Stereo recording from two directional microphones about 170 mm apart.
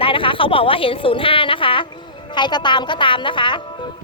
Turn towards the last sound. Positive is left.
turn(degrees=30)  # may be behind; listen again after turning